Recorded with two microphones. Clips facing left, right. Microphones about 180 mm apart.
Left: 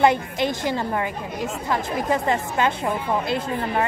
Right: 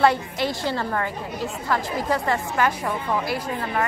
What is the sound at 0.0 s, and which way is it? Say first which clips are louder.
A woman's voice: left 1 dB; 20° left (ahead or behind).